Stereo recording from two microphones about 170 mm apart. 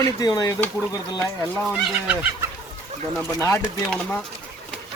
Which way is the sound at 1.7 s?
5° right (ahead or behind).